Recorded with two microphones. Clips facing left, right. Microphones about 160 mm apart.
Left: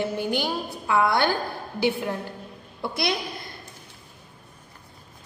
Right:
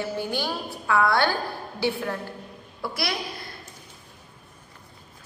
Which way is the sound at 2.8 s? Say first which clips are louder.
Left 3 dB; 20° left (ahead or behind).